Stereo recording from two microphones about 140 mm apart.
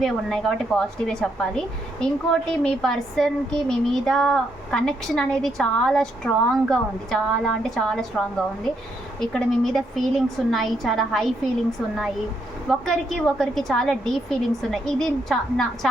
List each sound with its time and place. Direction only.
0.0 s a woman's voice: centre (ahead or behind)
9.2 s a woman's voice: 5° left (ahead or behind)
12.6 s a woman's voice: centre (ahead or behind)